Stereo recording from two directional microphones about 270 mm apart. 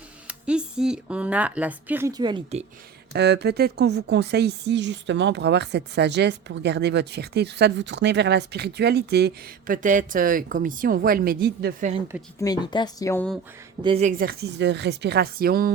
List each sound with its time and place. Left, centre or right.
0.3 s speech: centre
3.1 s speech: right
12.4 s speech: centre
13.8 s speech: right